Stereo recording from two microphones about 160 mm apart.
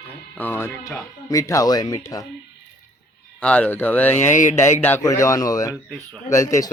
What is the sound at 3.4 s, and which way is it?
Speech, 10° left (ahead or behind).